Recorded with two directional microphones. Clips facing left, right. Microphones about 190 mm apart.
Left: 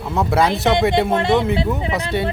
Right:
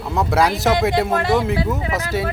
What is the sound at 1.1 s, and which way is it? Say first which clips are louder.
Speech: left 1 dB; 25° left (ahead or behind).